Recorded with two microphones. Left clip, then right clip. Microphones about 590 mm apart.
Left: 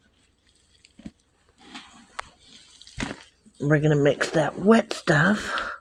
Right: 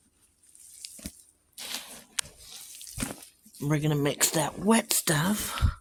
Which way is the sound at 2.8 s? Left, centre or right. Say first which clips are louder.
Right 1 dB; right.